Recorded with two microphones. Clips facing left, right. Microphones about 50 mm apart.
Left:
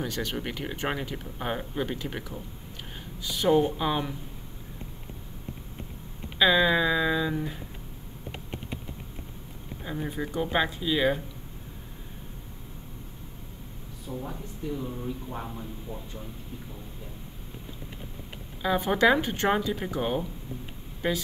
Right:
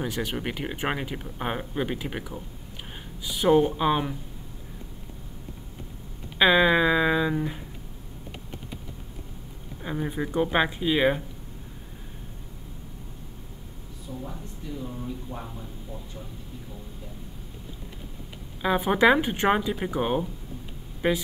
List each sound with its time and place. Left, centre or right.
0.0 s speech: centre
6.3 s speech: right
9.8 s speech: centre
14.1 s speech: left
18.6 s speech: centre